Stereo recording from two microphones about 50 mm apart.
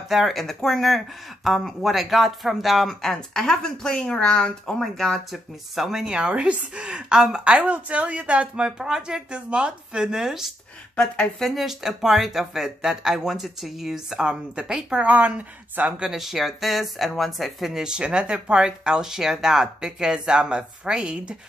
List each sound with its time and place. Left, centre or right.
0.1 s speech: centre
2.9 s speech: centre
5.3 s speech: centre
11.0 s speech: centre
11.4 s speech: centre; by 15.9 s right
16.0 s speech: centre
17.8 s speech: centre